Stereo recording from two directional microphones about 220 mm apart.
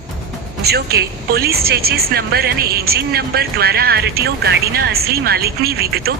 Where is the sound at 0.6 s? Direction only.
45° right (ahead or behind).